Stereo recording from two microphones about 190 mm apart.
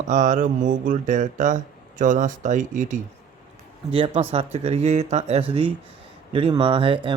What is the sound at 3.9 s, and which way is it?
Speech, 30° right (ahead or behind).